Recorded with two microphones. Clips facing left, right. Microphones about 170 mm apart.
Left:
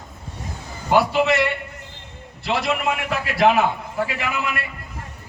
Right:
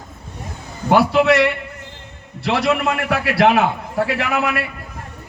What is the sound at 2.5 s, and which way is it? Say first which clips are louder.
A man's voice: right 4 dB; 75° right (ahead or behind).